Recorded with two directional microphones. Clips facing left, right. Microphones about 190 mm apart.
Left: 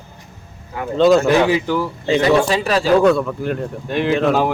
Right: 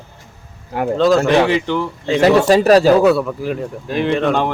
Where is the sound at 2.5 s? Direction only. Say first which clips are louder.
Right 8 dB; 45° right (ahead or behind).